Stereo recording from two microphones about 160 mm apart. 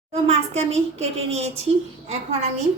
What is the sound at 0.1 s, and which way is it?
A woman's voice, 40° right (ahead or behind).